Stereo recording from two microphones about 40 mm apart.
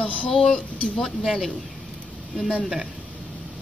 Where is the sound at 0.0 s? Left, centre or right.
Left.